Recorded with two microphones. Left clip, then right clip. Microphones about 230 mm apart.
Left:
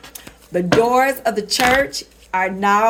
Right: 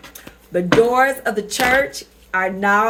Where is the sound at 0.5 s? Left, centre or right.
Left.